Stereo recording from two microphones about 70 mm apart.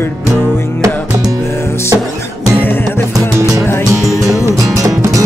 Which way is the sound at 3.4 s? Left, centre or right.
Right.